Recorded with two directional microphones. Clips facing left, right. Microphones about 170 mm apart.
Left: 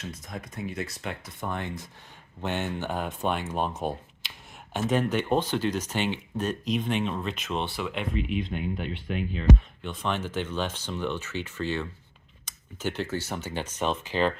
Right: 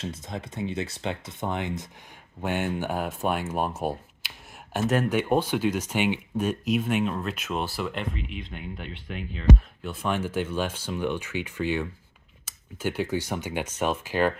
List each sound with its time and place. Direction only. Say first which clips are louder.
0.0 s speech: right 4 dB; 25° right (ahead or behind); by 9.2 s 15° left (ahead or behind)
9.8 s speech: right 3 dB; 10° right (ahead or behind)